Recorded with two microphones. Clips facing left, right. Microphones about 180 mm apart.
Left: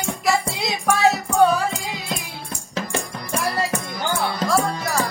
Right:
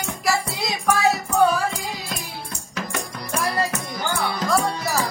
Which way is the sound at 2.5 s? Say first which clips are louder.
Left 6 dB; 25° left (ahead or behind).